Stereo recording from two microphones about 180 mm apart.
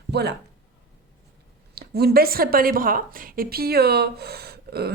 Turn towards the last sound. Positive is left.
turn(degrees=-60)  # may be behind; listen again after turning